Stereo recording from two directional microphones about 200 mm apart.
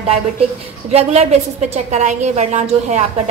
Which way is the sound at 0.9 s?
30° right (ahead or behind).